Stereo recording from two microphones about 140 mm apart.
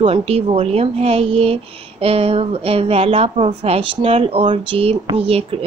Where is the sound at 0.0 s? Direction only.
45° right (ahead or behind).